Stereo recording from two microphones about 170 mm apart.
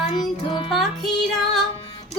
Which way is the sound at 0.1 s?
25° left (ahead or behind).